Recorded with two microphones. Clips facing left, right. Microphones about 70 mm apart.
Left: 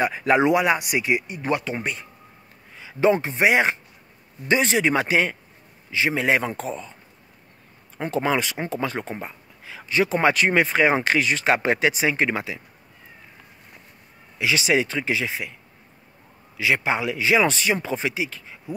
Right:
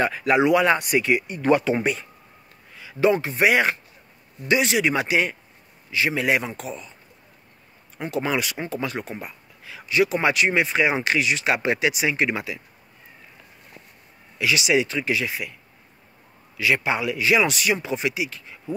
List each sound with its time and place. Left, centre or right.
0.2 s speech: left
0.6 s speech: centre
1.5 s speech: centre
2.8 s speech: left
8.0 s speech: left
14.4 s speech: left
16.5 s speech: left